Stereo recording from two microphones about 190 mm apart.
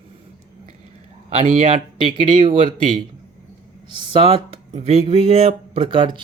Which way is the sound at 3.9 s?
25° right (ahead or behind).